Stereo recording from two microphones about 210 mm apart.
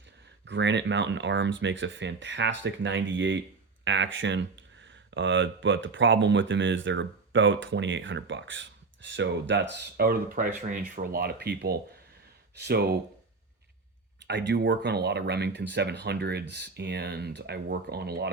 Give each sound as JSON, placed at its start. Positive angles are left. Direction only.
{"t": 0.4, "sound": "speech", "side_deg": -60}
{"t": 14.3, "sound": "speech", "side_deg": -55}